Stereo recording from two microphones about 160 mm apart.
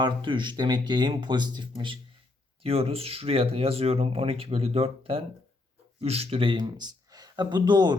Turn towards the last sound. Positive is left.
turn(degrees=-25)  # may be behind; listen again after turning